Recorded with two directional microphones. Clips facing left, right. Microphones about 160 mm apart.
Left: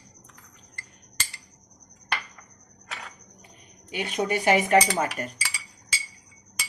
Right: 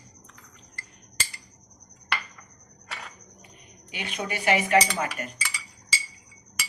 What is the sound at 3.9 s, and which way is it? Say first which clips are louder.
Speech: left 6 dB; 40° left (ahead or behind).